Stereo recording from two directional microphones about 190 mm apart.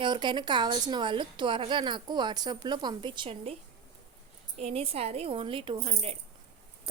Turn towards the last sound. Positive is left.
turn(degrees=-30)  # may be behind; listen again after turning